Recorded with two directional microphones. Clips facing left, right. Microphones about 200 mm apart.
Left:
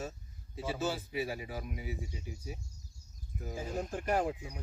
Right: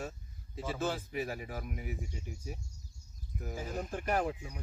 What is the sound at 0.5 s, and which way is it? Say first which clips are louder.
Speech: even; 5° left (ahead or behind).